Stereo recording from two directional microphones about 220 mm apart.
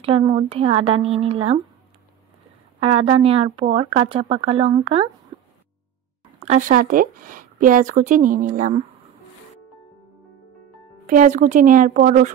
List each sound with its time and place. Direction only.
0.0 s speech: 25° right (ahead or behind)
2.8 s speech: 25° right (ahead or behind)
5.3 s a sound: 20° right (ahead or behind)
6.4 s speech: 35° right (ahead or behind)
11.1 s speech: 35° right (ahead or behind)